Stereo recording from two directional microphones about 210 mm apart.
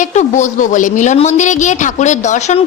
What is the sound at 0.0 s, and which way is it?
A woman's voice, 35° left (ahead or behind).